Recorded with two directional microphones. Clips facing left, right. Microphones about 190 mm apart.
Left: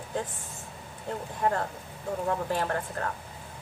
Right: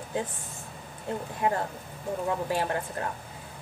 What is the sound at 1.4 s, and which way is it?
Speech, 15° right (ahead or behind).